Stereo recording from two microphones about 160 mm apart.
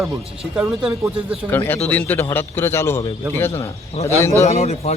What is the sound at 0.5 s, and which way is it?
Speech, 5° right (ahead or behind).